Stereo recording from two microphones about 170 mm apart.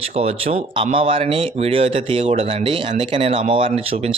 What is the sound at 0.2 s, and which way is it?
Speech, 35° right (ahead or behind).